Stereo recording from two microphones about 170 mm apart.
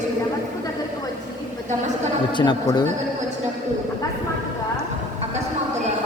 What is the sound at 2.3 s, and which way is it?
Speech, 25° left (ahead or behind).